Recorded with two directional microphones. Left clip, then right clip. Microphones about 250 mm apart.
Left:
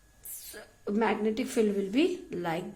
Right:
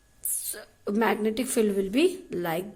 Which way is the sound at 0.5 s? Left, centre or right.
Centre.